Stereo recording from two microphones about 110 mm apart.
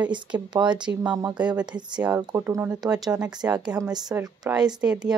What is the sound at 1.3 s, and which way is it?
Speech, 10° right (ahead or behind).